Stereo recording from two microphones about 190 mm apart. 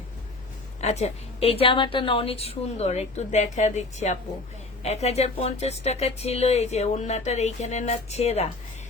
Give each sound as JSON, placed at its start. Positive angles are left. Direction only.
{"t": 0.8, "sound": "speech", "side_deg": 35}